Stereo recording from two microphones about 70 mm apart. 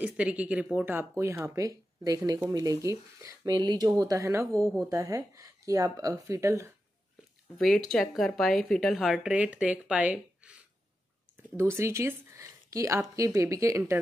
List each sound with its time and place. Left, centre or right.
0.0 s speech: centre
1.1 s speech: right
3.5 s speech: right
4.2 s speech: right
7.5 s speech: centre
9.3 s speech: centre
11.5 s speech: right